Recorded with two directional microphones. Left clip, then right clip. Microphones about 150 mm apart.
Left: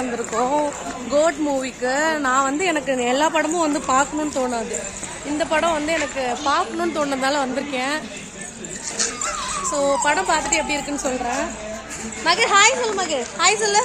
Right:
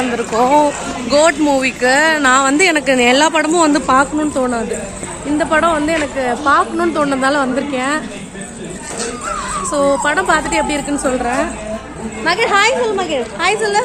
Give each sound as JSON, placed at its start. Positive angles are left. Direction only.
{"t": 0.3, "sound": "speech", "side_deg": -5}
{"t": 4.2, "sound": "speech", "side_deg": 15}
{"t": 9.4, "sound": "speech", "side_deg": 15}
{"t": 12.2, "sound": "a woman's voice", "side_deg": 50}